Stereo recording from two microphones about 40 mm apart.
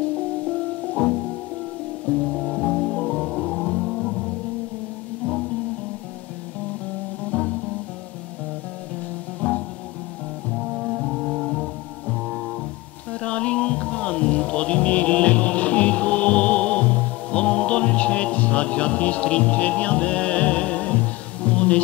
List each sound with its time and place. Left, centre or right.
0.5 s music: left
2.3 s music: centre
3.8 s music: centre
7.2 s music: left
9.4 s music: left
10.5 s brass instrument: centre
13.1 s music: left